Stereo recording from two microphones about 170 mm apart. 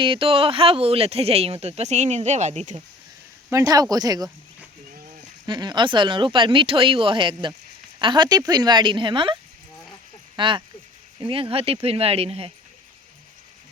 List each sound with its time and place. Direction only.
0.0 s speech: 30° right (ahead or behind)
3.5 s speech: 20° right (ahead or behind)
5.5 s speech: 25° right (ahead or behind)